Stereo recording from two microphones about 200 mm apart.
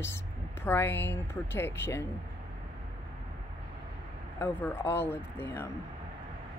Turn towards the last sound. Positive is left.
turn(degrees=10)  # may be behind; listen again after turning